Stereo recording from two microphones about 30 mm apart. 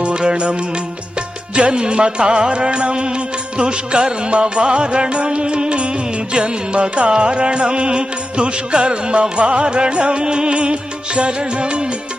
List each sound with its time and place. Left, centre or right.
0.0 s music: right